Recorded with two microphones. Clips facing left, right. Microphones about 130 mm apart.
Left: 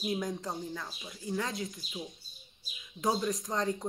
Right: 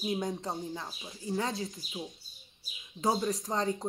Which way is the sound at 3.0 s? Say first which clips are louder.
Right 1 dB; 30° right (ahead or behind).